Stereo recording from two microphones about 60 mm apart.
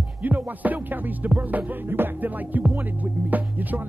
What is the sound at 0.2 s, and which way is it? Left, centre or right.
Music, right.